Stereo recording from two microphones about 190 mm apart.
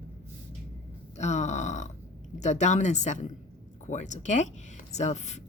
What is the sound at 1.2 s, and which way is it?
Speech, 35° left (ahead or behind).